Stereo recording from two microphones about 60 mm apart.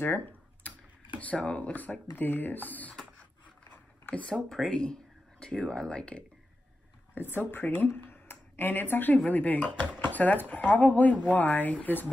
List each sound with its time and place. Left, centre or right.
0.0 s computer keyboard: left
1.2 s speech: left
4.1 s speech: centre
7.2 s speech: left